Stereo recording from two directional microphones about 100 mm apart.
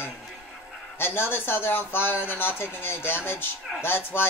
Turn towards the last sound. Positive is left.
turn(degrees=20)  # may be behind; listen again after turning